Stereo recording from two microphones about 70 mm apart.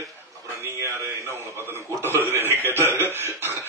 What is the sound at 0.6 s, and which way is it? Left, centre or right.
A man's voice, right.